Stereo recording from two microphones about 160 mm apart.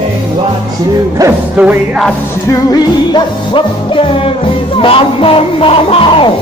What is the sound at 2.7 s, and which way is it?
Music, 25° left (ahead or behind).